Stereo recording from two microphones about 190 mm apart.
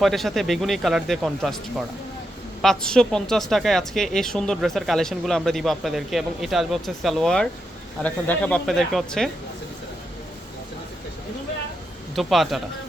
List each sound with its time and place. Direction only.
0.0 s speech: centre (ahead or behind)
2.6 s speech: 5° left (ahead or behind)
12.1 s speech: centre (ahead or behind)